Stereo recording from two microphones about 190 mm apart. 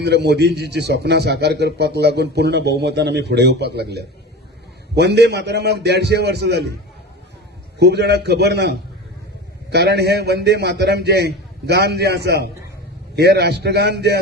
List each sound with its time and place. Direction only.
0.0 s a man's voice: 60° right (ahead or behind)
7.8 s a man's voice: 60° right (ahead or behind)